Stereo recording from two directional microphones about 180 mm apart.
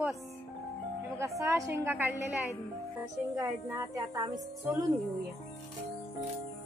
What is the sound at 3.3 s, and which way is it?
A woman's voice, 15° right (ahead or behind).